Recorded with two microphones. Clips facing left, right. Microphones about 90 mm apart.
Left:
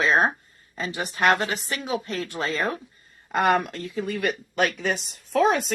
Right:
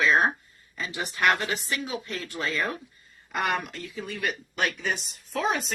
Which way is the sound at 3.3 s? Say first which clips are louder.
Left 7 dB; 45° left (ahead or behind).